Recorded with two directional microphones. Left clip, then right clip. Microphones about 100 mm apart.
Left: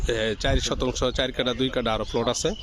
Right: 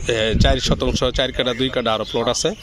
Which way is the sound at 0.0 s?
10° left (ahead or behind).